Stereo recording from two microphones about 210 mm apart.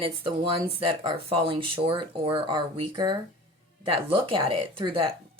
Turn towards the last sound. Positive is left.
turn(degrees=-25)  # may be behind; listen again after turning